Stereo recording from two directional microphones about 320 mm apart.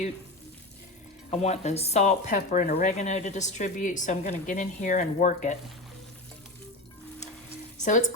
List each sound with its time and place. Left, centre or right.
1.3 s speech: left